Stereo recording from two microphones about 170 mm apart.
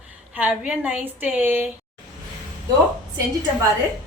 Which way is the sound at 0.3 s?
10° right (ahead or behind).